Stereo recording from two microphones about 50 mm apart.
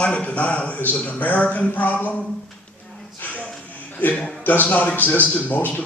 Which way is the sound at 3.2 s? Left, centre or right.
Left.